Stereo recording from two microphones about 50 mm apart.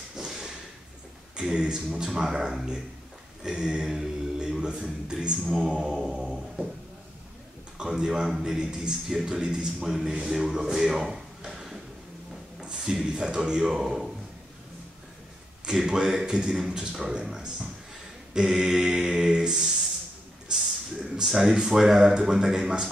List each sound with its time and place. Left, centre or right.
0.2 s a sound: centre
1.3 s a man's voice: centre
7.7 s a man's voice: centre
15.6 s a man's voice: centre
20.5 s a sound: centre
21.3 s a man's voice: centre